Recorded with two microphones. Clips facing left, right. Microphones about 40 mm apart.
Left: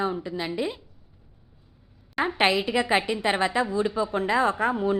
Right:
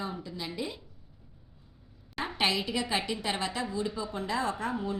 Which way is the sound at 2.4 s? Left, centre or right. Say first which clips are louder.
Left 6 dB; left.